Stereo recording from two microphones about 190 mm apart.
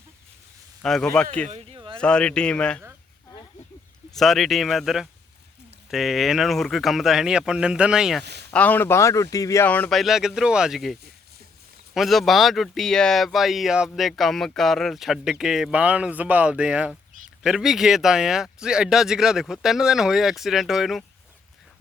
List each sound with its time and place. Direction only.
0.8 s speech: 5° left (ahead or behind)
1.5 s a sound: 30° right (ahead or behind)
2.0 s speech: 5° left (ahead or behind)
4.1 s speech: centre (ahead or behind)
8.2 s speech: 60° right (ahead or behind)
8.4 s speech: 10° left (ahead or behind)
11.9 s speech: centre (ahead or behind)